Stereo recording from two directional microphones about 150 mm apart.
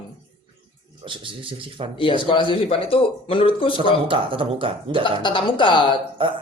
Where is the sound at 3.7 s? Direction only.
35° right (ahead or behind).